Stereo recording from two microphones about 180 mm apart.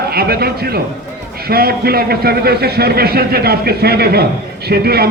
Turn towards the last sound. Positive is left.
turn(degrees=-60)  # may be behind; listen again after turning